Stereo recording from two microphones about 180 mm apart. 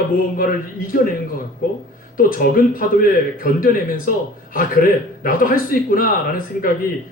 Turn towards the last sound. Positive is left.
turn(degrees=50)  # may be behind; listen again after turning